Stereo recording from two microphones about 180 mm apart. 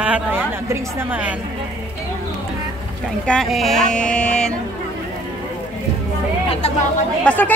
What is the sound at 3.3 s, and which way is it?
Speech, centre (ahead or behind).